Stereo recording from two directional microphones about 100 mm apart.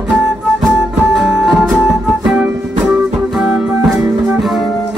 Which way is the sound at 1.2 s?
5° right (ahead or behind).